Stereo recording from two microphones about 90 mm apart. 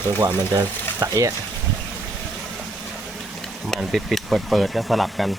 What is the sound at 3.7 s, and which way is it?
Speech, centre (ahead or behind).